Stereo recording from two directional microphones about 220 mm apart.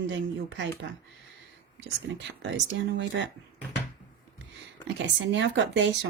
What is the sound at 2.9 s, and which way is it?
Speech, 55° right (ahead or behind).